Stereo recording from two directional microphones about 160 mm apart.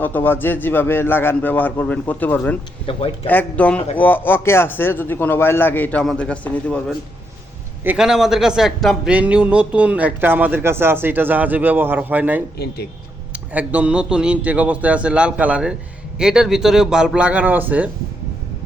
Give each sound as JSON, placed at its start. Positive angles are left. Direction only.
{"t": 0.0, "sound": "speech", "side_deg": 10}
{"t": 7.9, "sound": "speech", "side_deg": -5}
{"t": 12.5, "sound": "speech", "side_deg": 80}
{"t": 13.3, "sound": "speech", "side_deg": -10}